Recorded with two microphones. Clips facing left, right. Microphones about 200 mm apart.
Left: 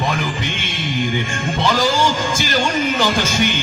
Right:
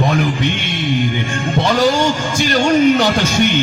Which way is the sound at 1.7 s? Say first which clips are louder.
Right 3 dB; 60° right (ahead or behind).